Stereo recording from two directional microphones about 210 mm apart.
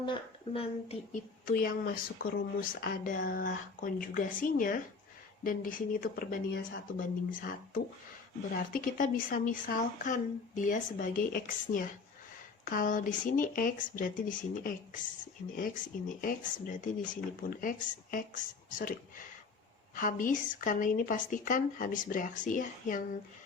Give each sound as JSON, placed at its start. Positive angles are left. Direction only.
{"t": 0.0, "sound": "a woman's voice", "side_deg": 25}
{"t": 20.0, "sound": "a woman's voice", "side_deg": 40}